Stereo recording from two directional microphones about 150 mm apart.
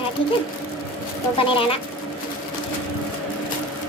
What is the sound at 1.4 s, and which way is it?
Speech, 35° left (ahead or behind).